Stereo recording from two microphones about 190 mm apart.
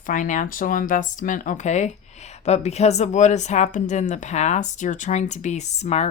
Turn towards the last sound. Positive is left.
turn(degrees=35)  # may be behind; listen again after turning